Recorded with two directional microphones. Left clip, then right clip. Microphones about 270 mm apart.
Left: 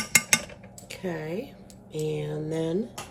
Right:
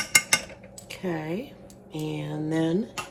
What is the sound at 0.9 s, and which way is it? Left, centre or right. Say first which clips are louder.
Speech: right 2 dB; right.